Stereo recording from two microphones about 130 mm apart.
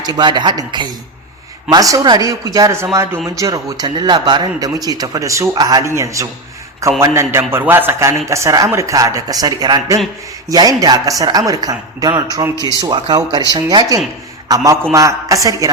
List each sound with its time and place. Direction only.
0.0 s a man's voice: 35° right (ahead or behind)